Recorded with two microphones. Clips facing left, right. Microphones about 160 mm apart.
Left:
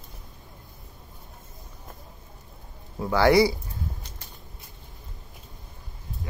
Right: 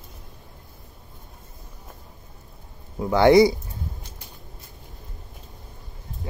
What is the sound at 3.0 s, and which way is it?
Speech, 20° right (ahead or behind).